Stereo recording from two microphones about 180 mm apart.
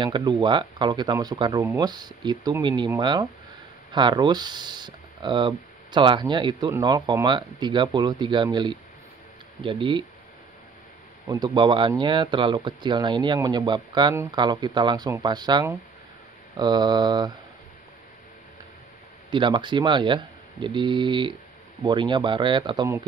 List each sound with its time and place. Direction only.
0.0 s speech: 25° right (ahead or behind)
11.2 s speech: 25° right (ahead or behind)
19.3 s speech: 25° right (ahead or behind)